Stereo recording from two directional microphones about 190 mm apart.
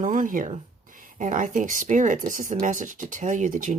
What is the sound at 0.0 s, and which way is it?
Speech, 45° right (ahead or behind).